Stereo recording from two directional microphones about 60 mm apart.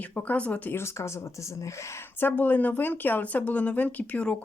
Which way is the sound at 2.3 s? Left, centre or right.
Left.